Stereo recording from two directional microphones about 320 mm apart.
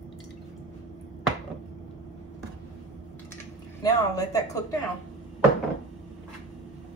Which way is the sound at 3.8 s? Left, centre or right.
Centre.